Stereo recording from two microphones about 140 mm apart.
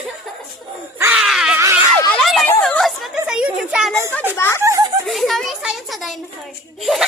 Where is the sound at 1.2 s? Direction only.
5° right (ahead or behind).